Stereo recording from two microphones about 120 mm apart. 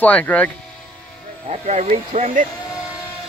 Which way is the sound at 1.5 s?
70° right (ahead or behind).